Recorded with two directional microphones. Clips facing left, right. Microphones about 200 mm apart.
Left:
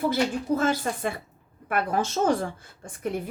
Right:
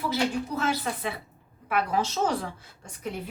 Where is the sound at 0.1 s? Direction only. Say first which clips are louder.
Left 3 dB; 50° left (ahead or behind).